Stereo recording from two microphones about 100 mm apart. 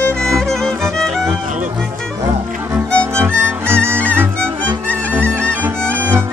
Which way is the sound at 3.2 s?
25° right (ahead or behind).